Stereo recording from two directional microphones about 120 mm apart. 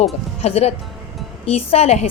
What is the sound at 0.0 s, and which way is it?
A woman's voice, 60° left (ahead or behind).